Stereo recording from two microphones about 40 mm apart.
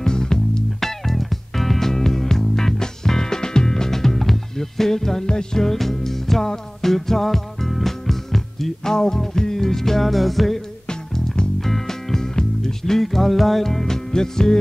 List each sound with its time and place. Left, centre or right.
0.0 s music: centre
10.9 s music: centre
11.6 s music: centre